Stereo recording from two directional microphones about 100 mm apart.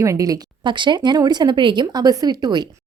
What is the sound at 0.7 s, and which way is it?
Speech, 50° right (ahead or behind).